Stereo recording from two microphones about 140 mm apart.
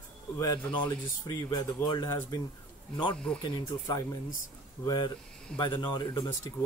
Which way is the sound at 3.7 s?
25° left (ahead or behind).